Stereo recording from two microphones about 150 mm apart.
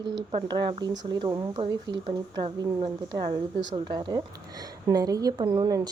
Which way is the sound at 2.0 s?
40° right (ahead or behind).